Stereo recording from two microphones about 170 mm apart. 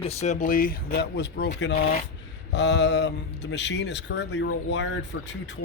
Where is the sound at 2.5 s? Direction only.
90° left.